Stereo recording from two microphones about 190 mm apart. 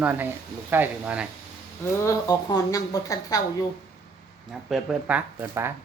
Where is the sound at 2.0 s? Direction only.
15° left (ahead or behind).